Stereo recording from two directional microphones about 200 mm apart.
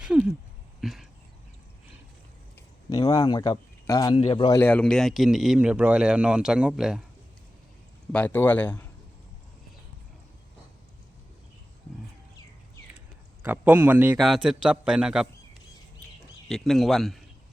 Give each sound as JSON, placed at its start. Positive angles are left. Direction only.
{"t": 0.0, "sound": "a sound", "side_deg": -5}
{"t": 2.6, "sound": "speech", "side_deg": 20}
{"t": 4.6, "sound": "speech", "side_deg": 5}
{"t": 8.1, "sound": "a man's voice", "side_deg": 10}
{"t": 13.4, "sound": "speech", "side_deg": -10}
{"t": 16.5, "sound": "speech", "side_deg": 0}